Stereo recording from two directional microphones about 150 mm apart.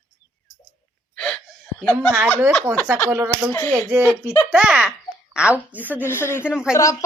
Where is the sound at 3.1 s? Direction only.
15° right (ahead or behind).